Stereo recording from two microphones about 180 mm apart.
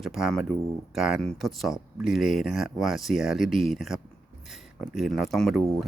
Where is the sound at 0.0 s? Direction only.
Centre (ahead or behind).